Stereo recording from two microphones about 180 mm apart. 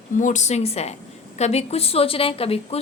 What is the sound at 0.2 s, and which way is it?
A woman's voice, 45° left (ahead or behind).